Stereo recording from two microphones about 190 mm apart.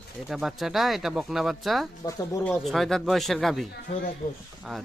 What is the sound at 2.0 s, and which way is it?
Speech, 15° left (ahead or behind).